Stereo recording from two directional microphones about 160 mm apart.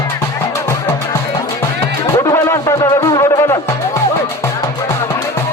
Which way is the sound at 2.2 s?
20° left (ahead or behind).